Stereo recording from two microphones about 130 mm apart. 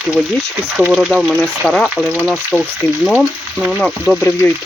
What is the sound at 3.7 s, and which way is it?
Speech, centre (ahead or behind).